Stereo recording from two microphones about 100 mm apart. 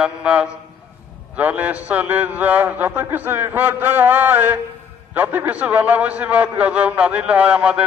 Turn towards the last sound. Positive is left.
turn(degrees=-10)  # may be behind; listen again after turning